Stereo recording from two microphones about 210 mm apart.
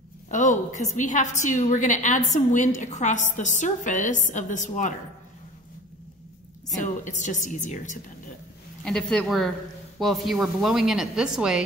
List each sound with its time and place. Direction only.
0.3 s a woman's voice: 35° left (ahead or behind)
6.8 s a woman's voice: 35° left (ahead or behind)
8.8 s speech: centre (ahead or behind)